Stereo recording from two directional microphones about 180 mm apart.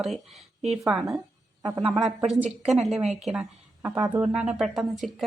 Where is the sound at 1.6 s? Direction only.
25° right (ahead or behind).